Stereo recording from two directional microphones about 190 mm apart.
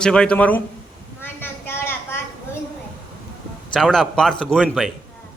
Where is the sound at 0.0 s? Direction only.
5° left (ahead or behind).